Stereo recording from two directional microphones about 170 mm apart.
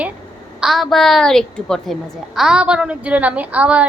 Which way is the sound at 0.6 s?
Centre (ahead or behind).